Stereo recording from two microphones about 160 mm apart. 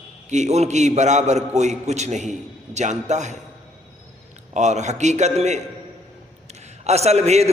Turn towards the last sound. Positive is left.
turn(degrees=-40)  # may be behind; listen again after turning